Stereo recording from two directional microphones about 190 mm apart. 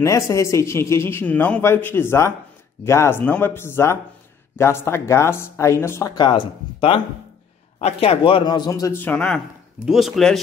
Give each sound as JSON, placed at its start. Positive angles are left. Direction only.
{"t": 0.0, "sound": "speech", "side_deg": 15}